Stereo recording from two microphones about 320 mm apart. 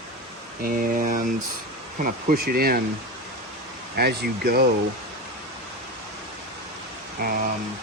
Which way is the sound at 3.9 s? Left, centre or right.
Right.